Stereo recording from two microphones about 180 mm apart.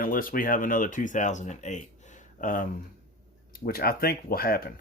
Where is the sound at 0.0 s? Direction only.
50° left (ahead or behind).